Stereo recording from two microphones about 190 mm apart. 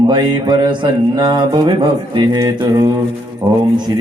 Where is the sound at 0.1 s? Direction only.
25° right (ahead or behind).